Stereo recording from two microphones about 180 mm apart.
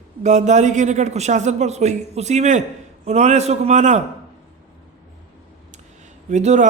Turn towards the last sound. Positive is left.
turn(degrees=-40)  # may be behind; listen again after turning